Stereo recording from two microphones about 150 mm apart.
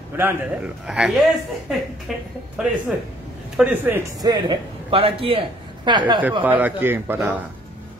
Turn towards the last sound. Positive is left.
turn(degrees=-15)  # may be behind; listen again after turning